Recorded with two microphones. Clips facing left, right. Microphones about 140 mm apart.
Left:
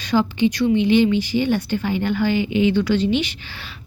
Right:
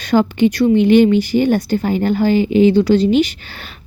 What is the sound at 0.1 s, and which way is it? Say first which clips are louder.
A woman's voice: right 5 dB; 55° right (ahead or behind).